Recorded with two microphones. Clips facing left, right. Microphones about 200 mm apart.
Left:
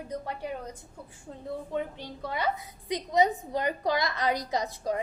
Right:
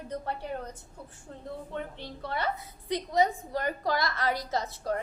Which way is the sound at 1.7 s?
10° left (ahead or behind).